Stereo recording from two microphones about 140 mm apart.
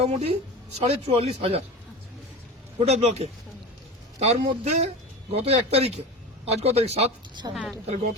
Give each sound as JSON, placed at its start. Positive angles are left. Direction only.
{"t": 0.0, "sound": "a man's voice", "side_deg": -50}
{"t": 2.7, "sound": "a man's voice", "side_deg": -50}
{"t": 7.5, "sound": "speech", "side_deg": 0}
{"t": 7.9, "sound": "speech", "side_deg": -60}